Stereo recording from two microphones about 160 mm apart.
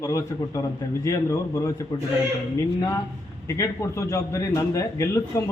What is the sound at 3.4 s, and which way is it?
A man's voice, 20° left (ahead or behind).